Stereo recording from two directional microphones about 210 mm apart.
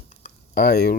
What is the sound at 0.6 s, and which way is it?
Speech, 50° left (ahead or behind).